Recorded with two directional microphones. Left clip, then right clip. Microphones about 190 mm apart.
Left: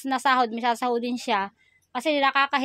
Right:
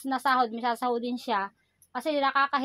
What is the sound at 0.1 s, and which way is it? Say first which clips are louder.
A woman's voice: left 3 dB; 40° left (ahead or behind).